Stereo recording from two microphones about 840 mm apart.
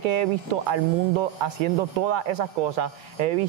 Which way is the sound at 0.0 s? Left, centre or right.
Right.